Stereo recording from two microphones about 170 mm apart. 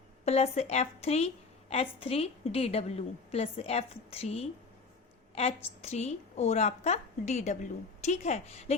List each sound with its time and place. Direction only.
0.3 s a woman's voice: 40° left (ahead or behind)